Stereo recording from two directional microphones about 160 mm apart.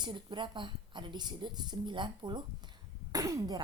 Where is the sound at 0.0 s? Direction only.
30° right (ahead or behind).